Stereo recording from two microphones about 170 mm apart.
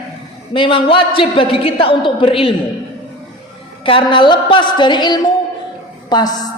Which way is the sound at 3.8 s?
30° left (ahead or behind).